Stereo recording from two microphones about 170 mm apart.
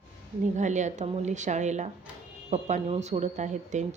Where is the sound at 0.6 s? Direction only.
45° right (ahead or behind).